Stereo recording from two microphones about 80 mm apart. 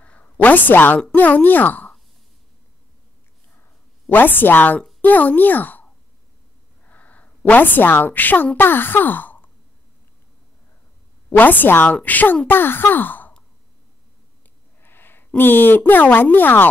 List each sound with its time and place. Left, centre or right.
0.0 s a woman's voice: centre
4.1 s speech: left
6.9 s a woman's voice: centre
11.2 s speech: left
14.8 s speech: left